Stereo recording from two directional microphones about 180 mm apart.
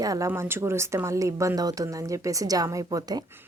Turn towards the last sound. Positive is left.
turn(degrees=-20)  # may be behind; listen again after turning